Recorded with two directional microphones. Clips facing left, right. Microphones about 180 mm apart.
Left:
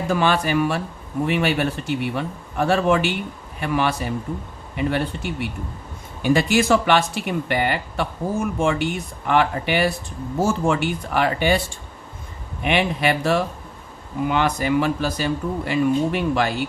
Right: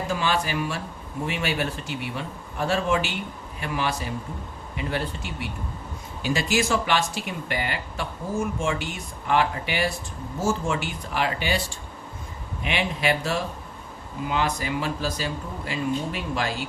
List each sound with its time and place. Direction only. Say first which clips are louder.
0.1 s speech: left 7 dB; 55° left (ahead or behind)